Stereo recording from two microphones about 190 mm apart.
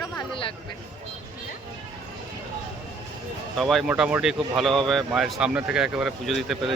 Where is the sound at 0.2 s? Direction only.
25° left (ahead or behind).